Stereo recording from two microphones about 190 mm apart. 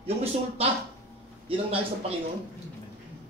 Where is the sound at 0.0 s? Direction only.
30° right (ahead or behind).